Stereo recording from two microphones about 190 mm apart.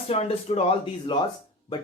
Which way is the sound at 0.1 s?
35° left (ahead or behind).